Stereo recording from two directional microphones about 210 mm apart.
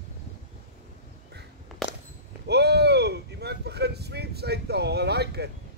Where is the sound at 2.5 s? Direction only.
50° right (ahead or behind).